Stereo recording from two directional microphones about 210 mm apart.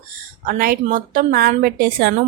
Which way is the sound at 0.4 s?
45° right (ahead or behind).